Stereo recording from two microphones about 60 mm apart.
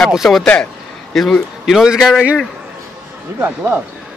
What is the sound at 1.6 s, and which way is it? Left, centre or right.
Speech, centre.